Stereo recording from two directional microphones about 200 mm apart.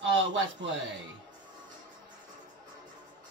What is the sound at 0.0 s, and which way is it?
Speech, 65° right (ahead or behind).